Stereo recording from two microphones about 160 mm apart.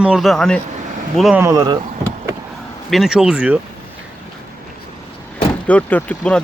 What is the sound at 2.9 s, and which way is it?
Speech, 5° right (ahead or behind).